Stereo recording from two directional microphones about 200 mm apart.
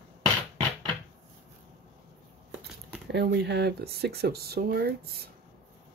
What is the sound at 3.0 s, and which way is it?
Speech, 55° right (ahead or behind).